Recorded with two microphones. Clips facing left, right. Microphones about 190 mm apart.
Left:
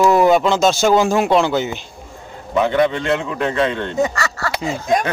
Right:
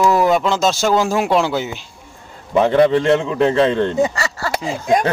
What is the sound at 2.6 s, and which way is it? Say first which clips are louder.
A man's voice: right 3 dB; 35° right (ahead or behind).